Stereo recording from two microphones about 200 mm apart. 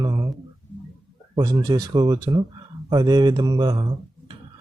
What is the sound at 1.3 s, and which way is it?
Speech, 20° right (ahead or behind).